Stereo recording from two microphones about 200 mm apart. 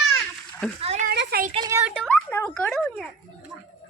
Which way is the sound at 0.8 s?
30° right (ahead or behind).